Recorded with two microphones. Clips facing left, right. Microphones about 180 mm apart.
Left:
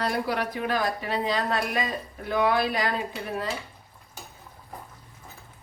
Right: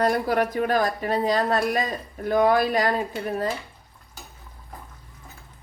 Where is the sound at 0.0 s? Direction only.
45° right (ahead or behind).